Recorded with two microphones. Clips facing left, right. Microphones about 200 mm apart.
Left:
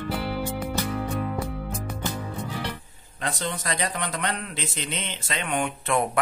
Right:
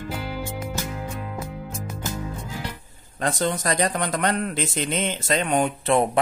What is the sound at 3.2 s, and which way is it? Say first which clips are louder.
A man's voice: right 6 dB; 45° right (ahead or behind).